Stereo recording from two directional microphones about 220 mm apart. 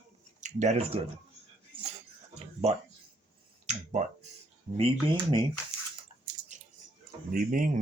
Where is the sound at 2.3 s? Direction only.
30° right (ahead or behind).